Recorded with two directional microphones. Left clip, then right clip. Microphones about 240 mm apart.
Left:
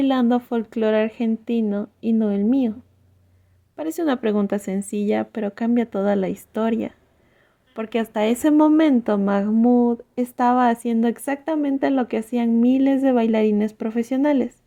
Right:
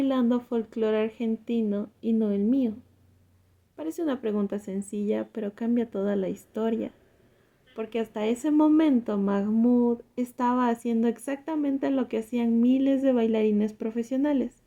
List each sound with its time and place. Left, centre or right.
0.0 s speech: left
3.8 s speech: left